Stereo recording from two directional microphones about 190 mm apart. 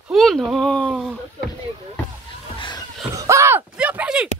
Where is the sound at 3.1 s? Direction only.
15° right (ahead or behind).